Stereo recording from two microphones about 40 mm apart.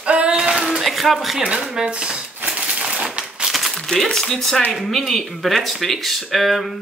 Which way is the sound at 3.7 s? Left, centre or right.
Centre.